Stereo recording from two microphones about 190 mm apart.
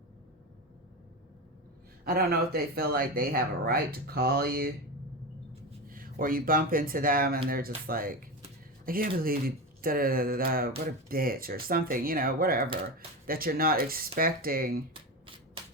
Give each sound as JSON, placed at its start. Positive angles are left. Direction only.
{"t": 2.0, "sound": "speech", "side_deg": -55}
{"t": 5.9, "sound": "speech", "side_deg": -50}